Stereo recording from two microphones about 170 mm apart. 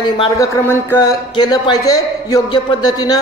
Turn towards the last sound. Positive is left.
turn(degrees=25)  # may be behind; listen again after turning